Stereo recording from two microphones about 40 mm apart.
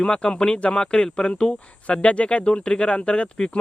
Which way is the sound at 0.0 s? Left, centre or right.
Left.